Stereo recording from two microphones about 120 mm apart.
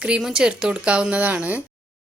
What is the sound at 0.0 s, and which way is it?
A woman's voice, 5° right (ahead or behind).